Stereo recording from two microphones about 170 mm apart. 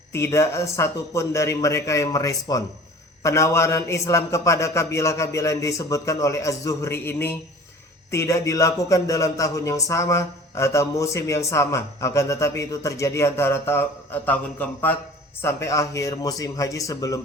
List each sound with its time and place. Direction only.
0.1 s a man's voice: 15° left (ahead or behind)